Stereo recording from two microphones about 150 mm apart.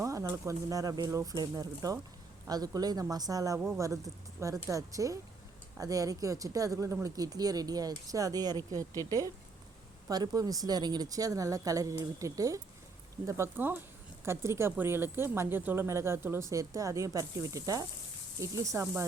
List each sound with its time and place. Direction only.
0.0 s speech: 20° right (ahead or behind)